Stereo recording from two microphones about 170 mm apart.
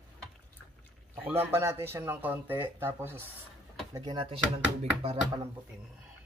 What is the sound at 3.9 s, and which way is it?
Speech, 25° right (ahead or behind).